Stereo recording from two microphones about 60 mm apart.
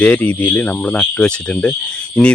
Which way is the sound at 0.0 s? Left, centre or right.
Left.